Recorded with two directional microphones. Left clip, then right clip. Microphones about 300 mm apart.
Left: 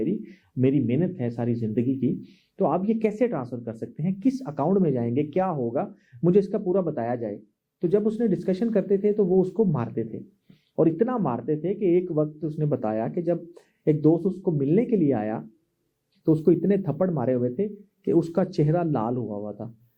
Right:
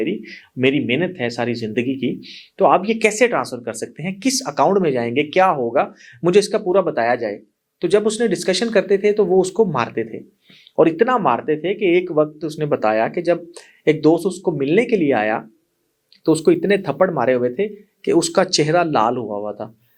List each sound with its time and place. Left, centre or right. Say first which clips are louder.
0.0 s speech: right 6 dB; centre
19.2 s speech: right 8 dB; centre